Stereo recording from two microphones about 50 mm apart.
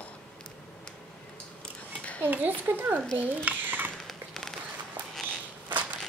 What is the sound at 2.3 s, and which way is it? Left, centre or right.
A child's voice, right.